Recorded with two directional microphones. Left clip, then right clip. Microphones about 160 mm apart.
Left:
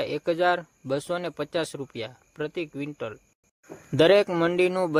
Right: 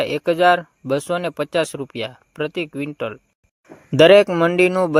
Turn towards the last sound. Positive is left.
turn(degrees=-35)  # may be behind; listen again after turning